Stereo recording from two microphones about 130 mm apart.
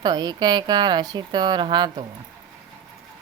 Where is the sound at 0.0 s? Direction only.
30° right (ahead or behind).